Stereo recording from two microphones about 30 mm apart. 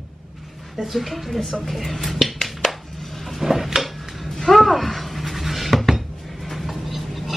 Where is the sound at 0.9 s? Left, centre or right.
Centre.